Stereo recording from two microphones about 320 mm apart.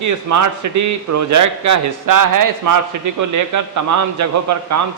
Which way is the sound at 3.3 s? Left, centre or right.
Right.